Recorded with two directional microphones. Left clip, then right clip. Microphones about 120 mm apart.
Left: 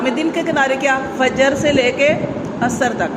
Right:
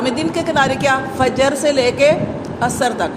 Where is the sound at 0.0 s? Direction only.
40° right (ahead or behind).